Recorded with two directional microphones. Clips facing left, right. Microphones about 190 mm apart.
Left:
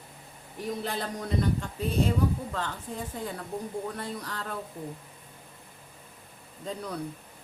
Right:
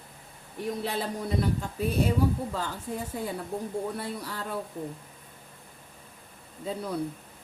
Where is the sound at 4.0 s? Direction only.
10° right (ahead or behind).